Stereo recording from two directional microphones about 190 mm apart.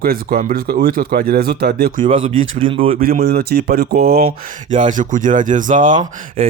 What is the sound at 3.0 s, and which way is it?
Speech, 55° right (ahead or behind).